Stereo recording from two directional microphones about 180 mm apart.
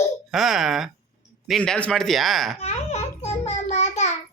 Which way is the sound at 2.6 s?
35° left (ahead or behind).